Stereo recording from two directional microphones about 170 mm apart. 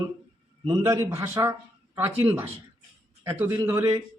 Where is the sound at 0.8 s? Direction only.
15° right (ahead or behind).